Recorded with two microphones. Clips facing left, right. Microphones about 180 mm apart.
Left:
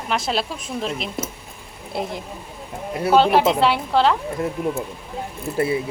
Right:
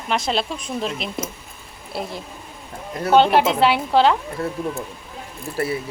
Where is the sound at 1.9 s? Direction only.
20° left (ahead or behind).